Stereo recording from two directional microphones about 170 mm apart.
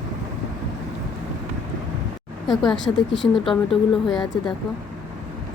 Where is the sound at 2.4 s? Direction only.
Centre (ahead or behind).